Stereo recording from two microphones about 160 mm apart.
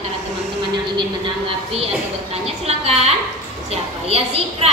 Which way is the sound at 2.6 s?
40° right (ahead or behind).